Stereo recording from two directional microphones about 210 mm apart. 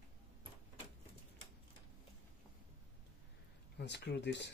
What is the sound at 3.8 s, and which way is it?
Speech, 55° left (ahead or behind).